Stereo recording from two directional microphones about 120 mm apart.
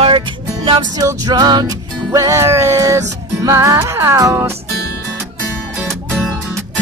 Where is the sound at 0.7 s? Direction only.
40° right (ahead or behind); by 4.6 s 25° right (ahead or behind).